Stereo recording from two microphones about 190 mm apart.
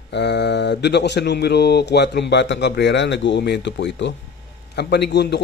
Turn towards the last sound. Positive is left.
turn(degrees=60)  # may be behind; listen again after turning